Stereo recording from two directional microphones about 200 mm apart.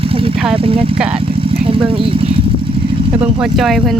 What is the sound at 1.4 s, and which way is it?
Vehicle, 25° right (ahead or behind).